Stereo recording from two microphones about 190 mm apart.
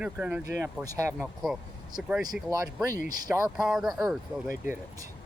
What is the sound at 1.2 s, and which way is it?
Speech, centre (ahead or behind).